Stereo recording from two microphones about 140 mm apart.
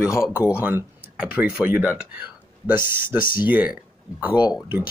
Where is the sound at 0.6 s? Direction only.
15° right (ahead or behind).